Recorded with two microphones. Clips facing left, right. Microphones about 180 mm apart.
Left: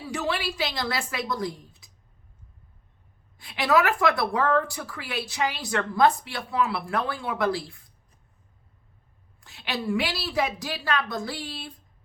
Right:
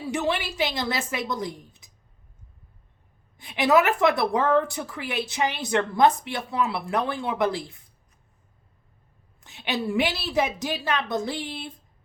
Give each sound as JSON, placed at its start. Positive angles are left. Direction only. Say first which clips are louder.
{"t": 0.1, "sound": "a woman's voice", "louder": "right 2 dB", "side_deg": -20}
{"t": 3.3, "sound": "a woman's voice", "louder": "right 2 dB", "side_deg": -20}
{"t": 9.4, "sound": "a woman's voice", "louder": "right 3 dB", "side_deg": -20}